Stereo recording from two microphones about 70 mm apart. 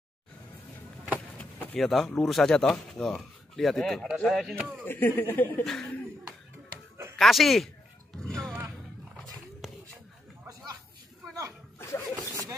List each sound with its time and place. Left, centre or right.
1.4 s door: left
1.8 s speech: centre
4.8 s speech: left
5.6 s speech: centre
7.2 s a sound: centre
11.8 s zipper: left